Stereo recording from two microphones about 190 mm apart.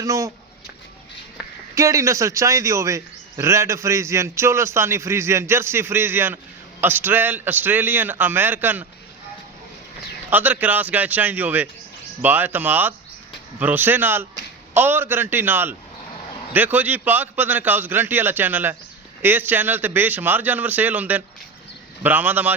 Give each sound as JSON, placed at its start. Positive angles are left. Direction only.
{"t": 0.0, "sound": "a man's voice", "side_deg": -15}
{"t": 1.7, "sound": "a man's voice", "side_deg": -15}
{"t": 10.2, "sound": "a man's voice", "side_deg": -10}